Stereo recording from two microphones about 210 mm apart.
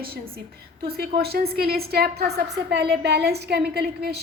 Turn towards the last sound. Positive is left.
turn(degrees=-50)  # may be behind; listen again after turning